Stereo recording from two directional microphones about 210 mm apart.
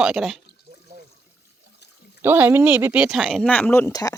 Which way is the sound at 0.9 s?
35° right (ahead or behind).